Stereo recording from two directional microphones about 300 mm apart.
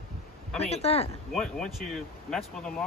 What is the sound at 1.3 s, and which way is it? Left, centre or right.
Speech, centre.